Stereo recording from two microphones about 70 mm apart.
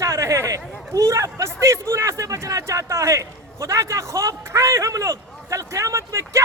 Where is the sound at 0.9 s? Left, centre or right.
Right.